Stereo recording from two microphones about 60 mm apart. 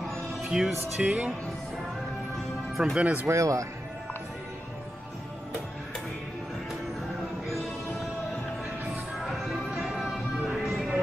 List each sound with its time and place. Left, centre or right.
0.4 s speech: centre
1.0 s speech: right
2.8 s speech: centre
3.3 s speech: right
9.2 s music: centre